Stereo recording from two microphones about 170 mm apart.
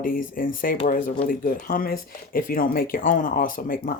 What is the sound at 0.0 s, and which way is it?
Speech, 55° left (ahead or behind).